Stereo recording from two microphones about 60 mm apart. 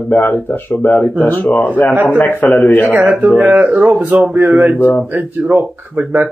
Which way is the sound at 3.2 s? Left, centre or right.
Right.